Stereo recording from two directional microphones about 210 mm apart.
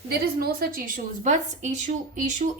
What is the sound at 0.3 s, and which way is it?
A woman's voice, 45° right (ahead or behind).